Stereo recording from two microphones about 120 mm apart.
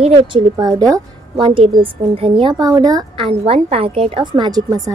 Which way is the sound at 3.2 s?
50° right (ahead or behind).